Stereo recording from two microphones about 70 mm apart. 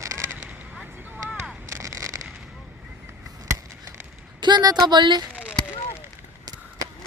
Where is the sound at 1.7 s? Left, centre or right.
Right.